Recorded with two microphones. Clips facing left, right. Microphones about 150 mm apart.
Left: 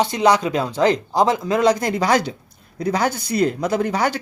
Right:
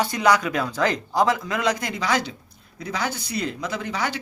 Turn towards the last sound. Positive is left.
turn(degrees=45)  # may be behind; listen again after turning